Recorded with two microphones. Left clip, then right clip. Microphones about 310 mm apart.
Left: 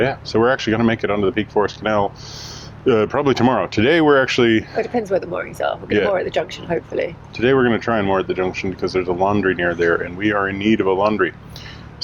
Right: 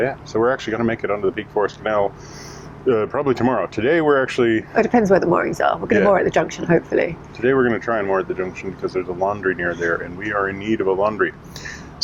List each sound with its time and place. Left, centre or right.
0.3 s speech: left
4.8 s speech: right
7.4 s speech: left